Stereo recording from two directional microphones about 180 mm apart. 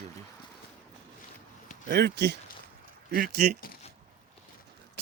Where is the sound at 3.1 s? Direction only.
55° right (ahead or behind).